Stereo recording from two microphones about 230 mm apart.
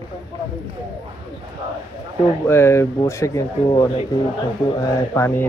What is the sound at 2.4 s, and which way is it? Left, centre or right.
Speech, centre.